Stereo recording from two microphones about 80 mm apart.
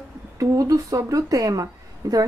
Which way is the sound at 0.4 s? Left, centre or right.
Right.